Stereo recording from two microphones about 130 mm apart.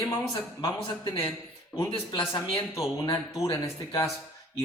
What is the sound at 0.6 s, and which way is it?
Speech, 35° left (ahead or behind).